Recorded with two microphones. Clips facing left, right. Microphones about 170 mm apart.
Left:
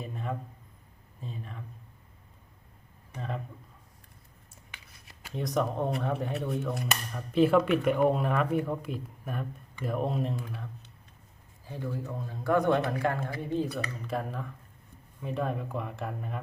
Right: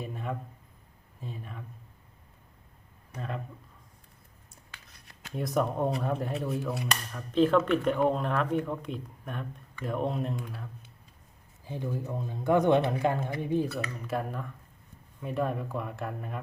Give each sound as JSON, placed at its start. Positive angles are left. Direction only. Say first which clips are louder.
{"t": 0.0, "sound": "a sound", "louder": "even", "side_deg": 0}
{"t": 1.2, "sound": "speech", "louder": "even", "side_deg": -5}
{"t": 3.2, "sound": "speech", "louder": "even", "side_deg": 0}
{"t": 4.9, "sound": "speech", "louder": "right 1 dB", "side_deg": 0}
{"t": 11.6, "sound": "speech", "louder": "right 1 dB", "side_deg": -15}
{"t": 14.1, "sound": "speech", "louder": "right 2 dB", "side_deg": 0}